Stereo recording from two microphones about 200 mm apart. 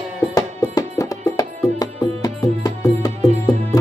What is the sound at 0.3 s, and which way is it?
Music, 15° left (ahead or behind).